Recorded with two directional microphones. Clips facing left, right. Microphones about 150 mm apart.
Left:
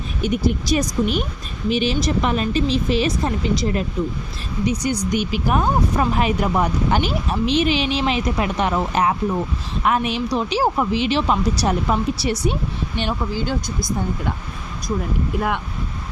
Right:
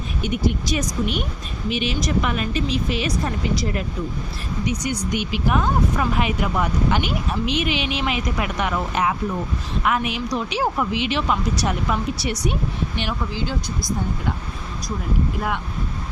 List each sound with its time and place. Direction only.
0.2 s speech: 35° left (ahead or behind)